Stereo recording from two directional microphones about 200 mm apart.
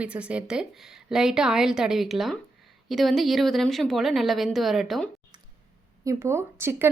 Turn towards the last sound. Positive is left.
turn(degrees=-10)  # may be behind; listen again after turning